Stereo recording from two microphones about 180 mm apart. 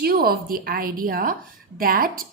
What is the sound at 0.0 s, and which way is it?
A woman's voice, 55° right (ahead or behind).